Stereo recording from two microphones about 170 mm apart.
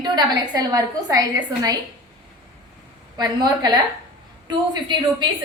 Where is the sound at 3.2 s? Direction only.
25° right (ahead or behind).